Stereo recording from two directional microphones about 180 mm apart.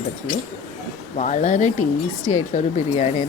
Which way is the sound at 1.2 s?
45° left (ahead or behind).